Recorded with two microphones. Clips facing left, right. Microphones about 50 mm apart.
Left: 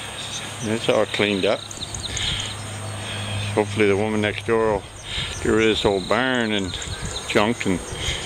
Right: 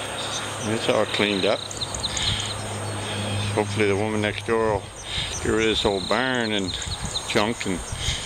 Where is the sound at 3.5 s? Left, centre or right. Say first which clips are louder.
Left 4 dB; centre.